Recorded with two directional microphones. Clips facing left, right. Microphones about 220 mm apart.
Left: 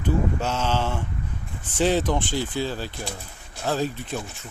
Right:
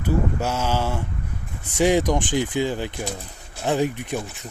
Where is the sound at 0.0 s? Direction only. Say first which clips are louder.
Right 1 dB; 10° right (ahead or behind).